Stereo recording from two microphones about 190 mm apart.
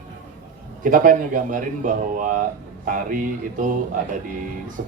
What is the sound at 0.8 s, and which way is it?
A man's voice, 45° right (ahead or behind).